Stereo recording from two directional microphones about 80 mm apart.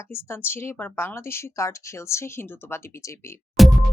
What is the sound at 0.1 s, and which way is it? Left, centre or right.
Speech, left.